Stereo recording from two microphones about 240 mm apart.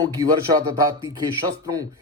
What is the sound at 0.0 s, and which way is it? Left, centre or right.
Speech, centre.